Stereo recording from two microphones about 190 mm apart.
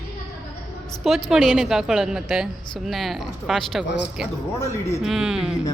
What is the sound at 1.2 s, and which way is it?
Speech, centre (ahead or behind).